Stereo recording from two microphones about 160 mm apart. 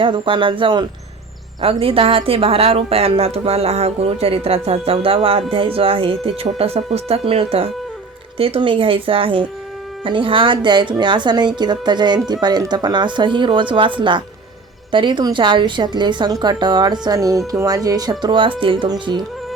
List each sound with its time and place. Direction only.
0.0 s a woman's voice: 30° right (ahead or behind)